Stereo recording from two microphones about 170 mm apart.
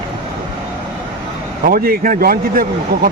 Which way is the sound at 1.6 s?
60° right (ahead or behind).